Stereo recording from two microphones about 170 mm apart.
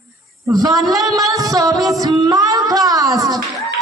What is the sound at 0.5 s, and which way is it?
Speech, 20° right (ahead or behind).